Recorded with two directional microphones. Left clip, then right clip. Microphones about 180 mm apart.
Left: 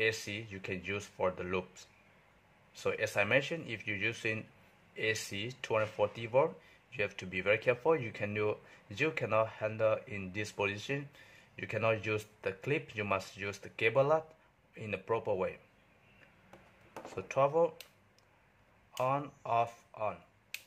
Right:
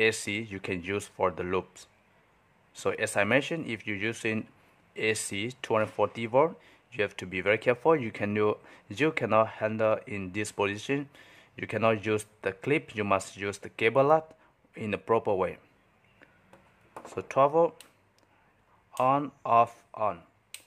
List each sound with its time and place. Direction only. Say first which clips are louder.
0.0 s speech: right 7 dB; 30° right (ahead or behind)
17.0 s speech: right 6 dB; 30° right (ahead or behind)
18.9 s speech: right 8 dB; 30° right (ahead or behind)